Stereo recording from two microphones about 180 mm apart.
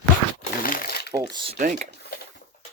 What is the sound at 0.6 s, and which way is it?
Crumpling, 55° left (ahead or behind).